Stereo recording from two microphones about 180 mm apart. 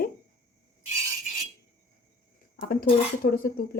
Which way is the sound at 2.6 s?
55° left (ahead or behind).